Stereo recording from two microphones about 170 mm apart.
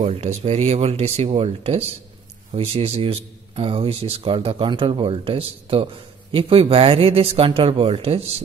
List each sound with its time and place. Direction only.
0.0 s a man's voice: 40° right (ahead or behind)